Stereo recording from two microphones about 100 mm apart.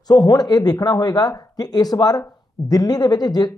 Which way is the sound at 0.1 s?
40° left (ahead or behind).